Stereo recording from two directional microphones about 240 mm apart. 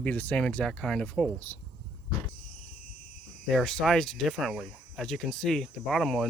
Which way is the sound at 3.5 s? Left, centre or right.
Centre.